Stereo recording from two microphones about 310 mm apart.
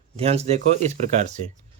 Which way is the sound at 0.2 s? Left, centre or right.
Centre.